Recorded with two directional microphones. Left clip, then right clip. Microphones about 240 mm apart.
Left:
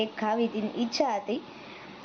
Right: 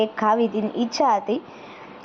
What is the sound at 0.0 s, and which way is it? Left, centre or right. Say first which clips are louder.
A woman's voice: right 8 dB; centre.